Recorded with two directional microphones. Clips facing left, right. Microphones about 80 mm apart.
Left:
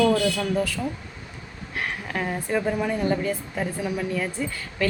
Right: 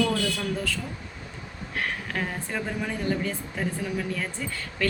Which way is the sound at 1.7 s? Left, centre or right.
Centre.